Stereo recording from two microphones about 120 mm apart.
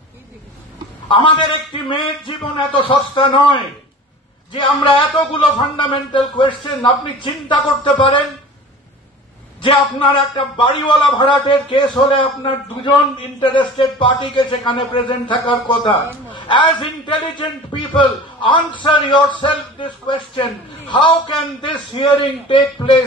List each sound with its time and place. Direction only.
1.0 s a man's voice: 45° left (ahead or behind)
9.6 s a man's voice: 45° left (ahead or behind)
13.4 s a man's voice: 45° left (ahead or behind)